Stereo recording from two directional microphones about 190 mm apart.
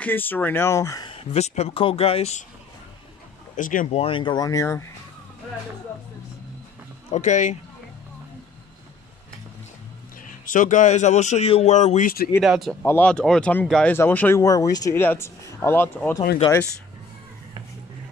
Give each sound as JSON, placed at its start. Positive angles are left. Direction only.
{"t": 0.0, "sound": "speech", "side_deg": 10}
{"t": 3.5, "sound": "speech", "side_deg": 45}
{"t": 7.1, "sound": "speech", "side_deg": 40}
{"t": 10.4, "sound": "speech", "side_deg": 45}
{"t": 12.4, "sound": "speech", "side_deg": 0}